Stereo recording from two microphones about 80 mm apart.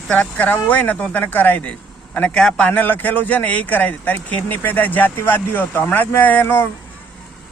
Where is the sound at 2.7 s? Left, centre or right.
Left.